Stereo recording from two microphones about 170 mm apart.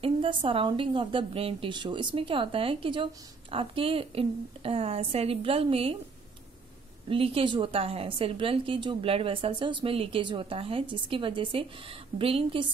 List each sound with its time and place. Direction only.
0.0 s a woman's voice: 30° right (ahead or behind)
7.1 s a woman's voice: 35° right (ahead or behind)